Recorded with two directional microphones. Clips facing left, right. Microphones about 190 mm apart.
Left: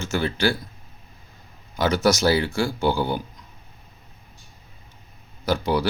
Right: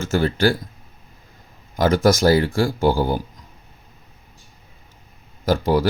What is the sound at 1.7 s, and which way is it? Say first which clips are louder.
Speech: right 4 dB; 50° right (ahead or behind).